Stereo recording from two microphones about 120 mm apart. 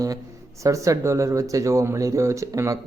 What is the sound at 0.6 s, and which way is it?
Speech, 25° right (ahead or behind).